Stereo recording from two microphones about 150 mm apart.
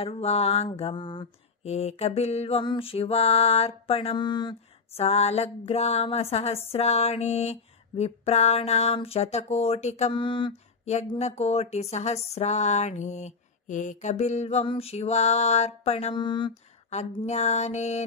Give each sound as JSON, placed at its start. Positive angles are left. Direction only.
{"t": 0.0, "sound": "speech", "side_deg": 40}
{"t": 0.7, "sound": "music", "side_deg": 35}
{"t": 1.6, "sound": "music", "side_deg": 45}
{"t": 4.9, "sound": "speech", "side_deg": 45}
{"t": 10.1, "sound": "music", "side_deg": 35}
{"t": 11.1, "sound": "speech", "side_deg": 45}
{"t": 16.3, "sound": "music", "side_deg": 30}
{"t": 16.9, "sound": "speech", "side_deg": 50}